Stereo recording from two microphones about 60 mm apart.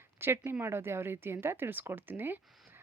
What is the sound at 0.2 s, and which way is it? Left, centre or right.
A woman's voice, right.